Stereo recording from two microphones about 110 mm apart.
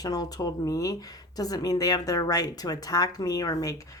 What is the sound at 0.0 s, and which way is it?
Speech, 35° left (ahead or behind).